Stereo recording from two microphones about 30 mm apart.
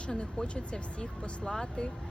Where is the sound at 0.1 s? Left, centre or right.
Left.